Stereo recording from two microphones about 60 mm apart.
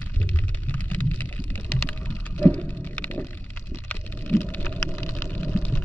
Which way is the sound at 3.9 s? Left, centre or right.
Left.